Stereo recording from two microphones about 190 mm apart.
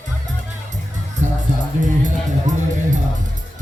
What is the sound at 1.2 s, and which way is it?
Music, 40° right (ahead or behind).